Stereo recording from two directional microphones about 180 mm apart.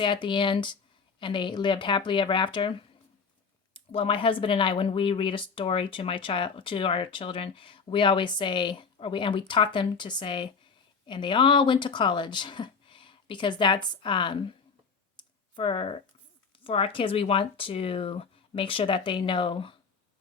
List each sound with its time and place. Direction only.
0.0 s speech: 25° left (ahead or behind)
3.8 s speech: 30° left (ahead or behind)
15.1 s computer keyboard: 25° left (ahead or behind)
16.6 s speech: 30° left (ahead or behind)